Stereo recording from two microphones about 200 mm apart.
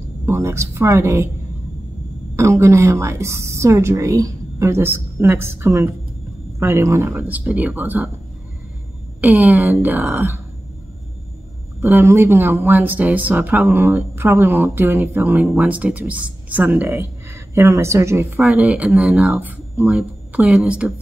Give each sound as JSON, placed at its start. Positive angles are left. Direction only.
{"t": 0.3, "sound": "speech", "side_deg": -15}
{"t": 2.3, "sound": "a woman's voice", "side_deg": -15}
{"t": 9.2, "sound": "speech", "side_deg": -10}
{"t": 11.8, "sound": "speech", "side_deg": -10}